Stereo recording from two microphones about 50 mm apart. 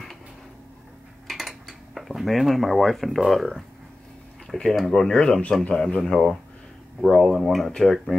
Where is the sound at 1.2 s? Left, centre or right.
Centre.